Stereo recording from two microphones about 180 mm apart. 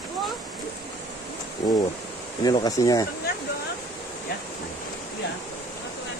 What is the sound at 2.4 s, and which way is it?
Speech, 20° left (ahead or behind).